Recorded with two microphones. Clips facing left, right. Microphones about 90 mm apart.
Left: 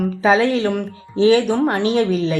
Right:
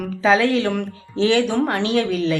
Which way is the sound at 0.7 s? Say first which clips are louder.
Left 2 dB; 5° left (ahead or behind).